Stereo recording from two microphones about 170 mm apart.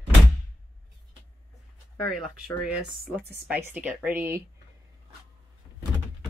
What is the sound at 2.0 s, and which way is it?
Speech, centre (ahead or behind).